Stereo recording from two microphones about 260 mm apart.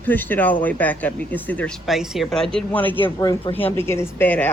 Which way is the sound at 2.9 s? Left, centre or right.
Centre.